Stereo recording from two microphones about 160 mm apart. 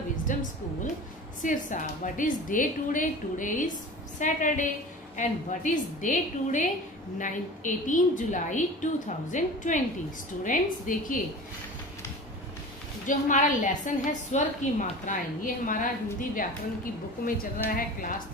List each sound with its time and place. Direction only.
0.3 s a sound: 55° left (ahead or behind)
1.4 s a woman's voice: 55° left (ahead or behind)
13.0 s a woman's voice: 55° left (ahead or behind)
17.6 s a woman's voice: 60° left (ahead or behind)